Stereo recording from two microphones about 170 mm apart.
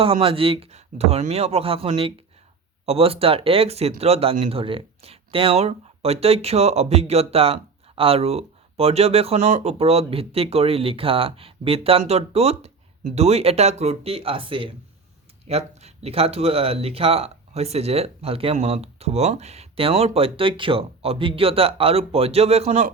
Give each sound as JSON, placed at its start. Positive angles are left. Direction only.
{"t": 0.0, "sound": "speech", "side_deg": -30}